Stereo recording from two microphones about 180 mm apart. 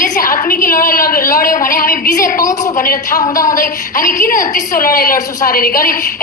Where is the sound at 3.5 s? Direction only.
50° left (ahead or behind).